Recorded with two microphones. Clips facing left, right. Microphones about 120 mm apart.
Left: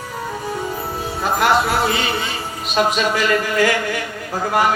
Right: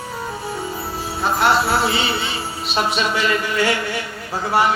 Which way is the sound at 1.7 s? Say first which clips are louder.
Even; 45° left (ahead or behind).